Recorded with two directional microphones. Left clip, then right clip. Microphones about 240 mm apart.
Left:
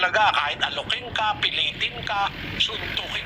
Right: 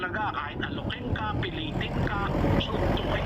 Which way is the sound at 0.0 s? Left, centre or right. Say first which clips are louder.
Left 11 dB; left.